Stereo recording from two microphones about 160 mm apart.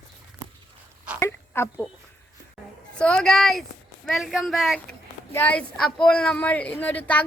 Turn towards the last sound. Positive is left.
turn(degrees=10)  # may be behind; listen again after turning